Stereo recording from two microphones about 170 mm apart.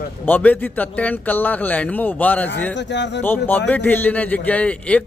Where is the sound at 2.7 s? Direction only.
90° left.